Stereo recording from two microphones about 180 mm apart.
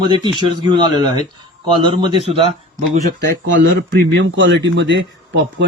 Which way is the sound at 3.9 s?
80° right.